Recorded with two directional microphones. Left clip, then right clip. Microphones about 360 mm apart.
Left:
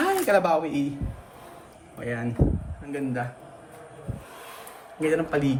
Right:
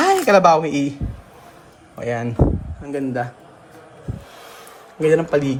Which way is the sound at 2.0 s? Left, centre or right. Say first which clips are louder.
Right 7 dB; centre.